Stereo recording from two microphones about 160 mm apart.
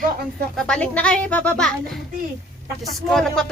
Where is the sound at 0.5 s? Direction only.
5° left (ahead or behind).